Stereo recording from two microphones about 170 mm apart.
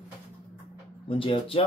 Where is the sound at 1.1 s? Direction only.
30° left (ahead or behind).